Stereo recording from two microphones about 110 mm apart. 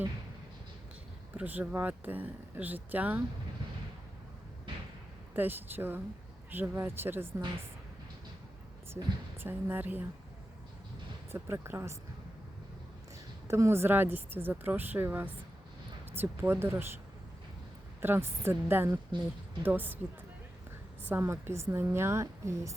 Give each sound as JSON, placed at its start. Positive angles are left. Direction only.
{"t": 1.3, "sound": "speech", "side_deg": -15}
{"t": 5.3, "sound": "speech", "side_deg": -20}
{"t": 9.4, "sound": "speech", "side_deg": -20}
{"t": 11.3, "sound": "speech", "side_deg": -25}
{"t": 13.5, "sound": "speech", "side_deg": -25}
{"t": 18.0, "sound": "a woman's voice", "side_deg": -20}